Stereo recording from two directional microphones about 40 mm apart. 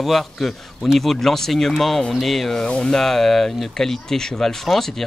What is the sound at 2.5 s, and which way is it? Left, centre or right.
Speech, centre.